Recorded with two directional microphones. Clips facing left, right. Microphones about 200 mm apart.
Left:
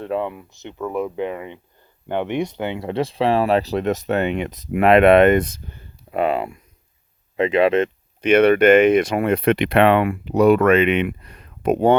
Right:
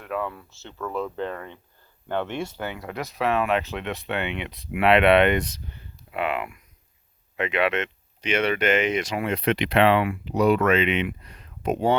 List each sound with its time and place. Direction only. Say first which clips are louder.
0.0 s speech: left 6 dB; 25° left (ahead or behind)
8.2 s speech: left 10 dB; 55° left (ahead or behind)